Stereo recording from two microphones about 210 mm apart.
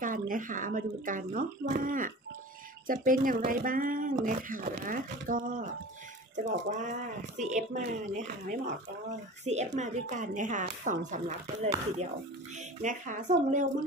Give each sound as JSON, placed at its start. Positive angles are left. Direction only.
{"t": 0.3, "sound": "speech", "side_deg": -40}
{"t": 12.8, "sound": "speech", "side_deg": -35}